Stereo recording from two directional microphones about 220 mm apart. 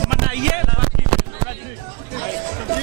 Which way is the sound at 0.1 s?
15° right (ahead or behind).